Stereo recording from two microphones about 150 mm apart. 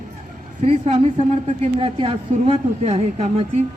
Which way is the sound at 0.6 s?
40° right (ahead or behind).